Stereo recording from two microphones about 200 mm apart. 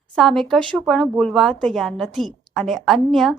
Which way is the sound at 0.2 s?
Centre (ahead or behind).